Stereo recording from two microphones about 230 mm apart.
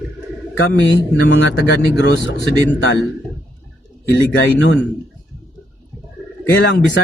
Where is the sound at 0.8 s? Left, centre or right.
Left.